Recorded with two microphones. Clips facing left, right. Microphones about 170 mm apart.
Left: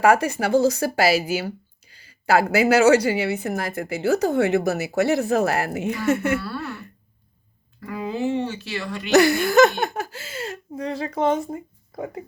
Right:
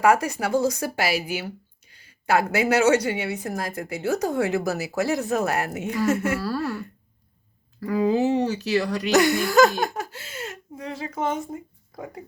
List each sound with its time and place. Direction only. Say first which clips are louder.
0.0 s speech: left 2 dB; 30° left (ahead or behind)
6.1 s speech: left 1 dB; 35° right (ahead or behind)
7.8 s speech: right 6 dB; 35° right (ahead or behind)
9.5 s a woman's voice: left 2 dB; 25° left (ahead or behind)